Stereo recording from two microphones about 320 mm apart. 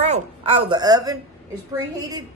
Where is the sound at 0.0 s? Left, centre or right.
Centre.